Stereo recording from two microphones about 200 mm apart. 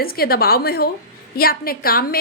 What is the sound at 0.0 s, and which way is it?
A woman's voice, 50° left (ahead or behind).